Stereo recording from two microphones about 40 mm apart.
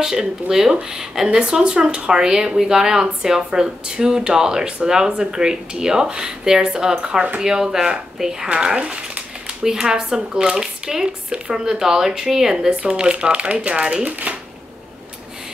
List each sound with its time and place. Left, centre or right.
0.0 s speech: centre
12.5 s speech: right
14.3 s shuffling cards: right